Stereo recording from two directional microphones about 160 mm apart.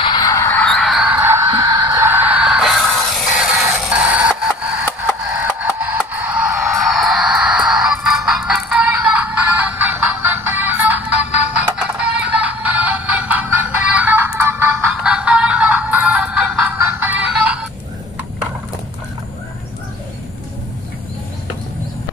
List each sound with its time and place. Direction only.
0.0 s music: 25° left (ahead or behind)
0.7 s music: centre (ahead or behind); by 2.0 s 25° right (ahead or behind)
2.0 s music: 10° right (ahead or behind)